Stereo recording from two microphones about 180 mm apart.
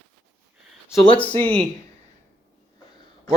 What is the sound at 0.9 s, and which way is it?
Speech, 10° left (ahead or behind).